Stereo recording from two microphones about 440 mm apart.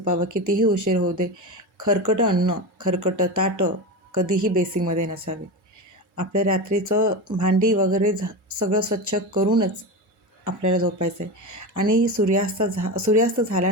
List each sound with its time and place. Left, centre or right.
0.1 s speech: right